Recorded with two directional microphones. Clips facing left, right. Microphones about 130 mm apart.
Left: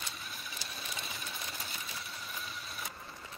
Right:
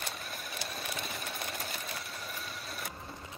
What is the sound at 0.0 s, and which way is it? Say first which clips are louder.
Sewing machine: right 4 dB; 50° right (ahead or behind).